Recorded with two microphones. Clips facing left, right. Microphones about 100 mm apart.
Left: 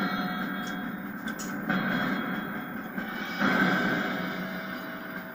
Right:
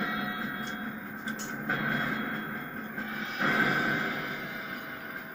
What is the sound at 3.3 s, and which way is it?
Music, 20° left (ahead or behind).